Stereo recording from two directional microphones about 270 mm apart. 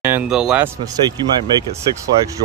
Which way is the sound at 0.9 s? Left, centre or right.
Centre.